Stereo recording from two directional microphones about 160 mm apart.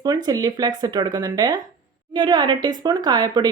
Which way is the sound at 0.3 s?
25° right (ahead or behind).